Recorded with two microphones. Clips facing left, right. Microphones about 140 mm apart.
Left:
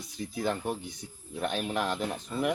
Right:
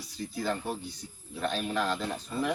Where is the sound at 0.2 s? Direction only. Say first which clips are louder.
Left 1 dB; 20° left (ahead or behind).